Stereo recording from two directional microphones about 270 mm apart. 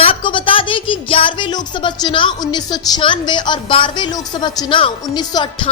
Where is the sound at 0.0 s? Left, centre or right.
Centre.